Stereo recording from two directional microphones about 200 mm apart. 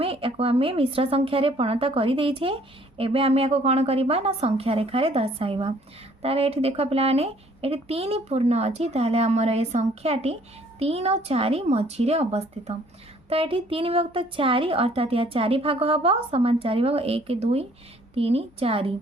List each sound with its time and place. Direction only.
0.0 s a woman's voice: 30° right (ahead or behind)